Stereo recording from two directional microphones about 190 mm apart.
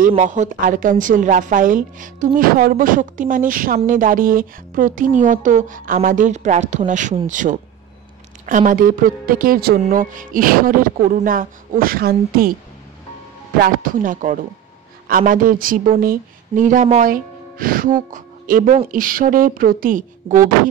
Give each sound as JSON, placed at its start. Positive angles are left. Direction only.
{"t": 0.1, "sound": "a woman's voice", "side_deg": -40}
{"t": 9.8, "sound": "a woman's voice", "side_deg": -40}
{"t": 13.6, "sound": "a woman's voice", "side_deg": -45}